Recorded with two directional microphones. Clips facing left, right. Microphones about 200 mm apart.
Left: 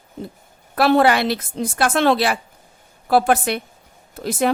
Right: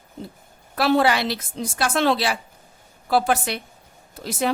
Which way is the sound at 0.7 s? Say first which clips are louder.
Left 4 dB; 55° left (ahead or behind).